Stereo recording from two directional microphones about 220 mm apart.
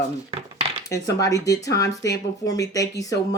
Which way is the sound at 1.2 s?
15° left (ahead or behind).